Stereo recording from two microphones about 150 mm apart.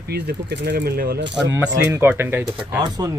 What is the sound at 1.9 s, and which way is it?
Speech, 15° right (ahead or behind).